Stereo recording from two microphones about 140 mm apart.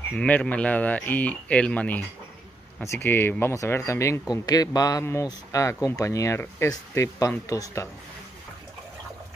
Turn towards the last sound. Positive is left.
turn(degrees=20)  # may be behind; listen again after turning